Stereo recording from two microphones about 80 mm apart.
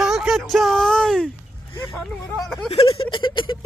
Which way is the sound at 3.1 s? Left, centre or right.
Left.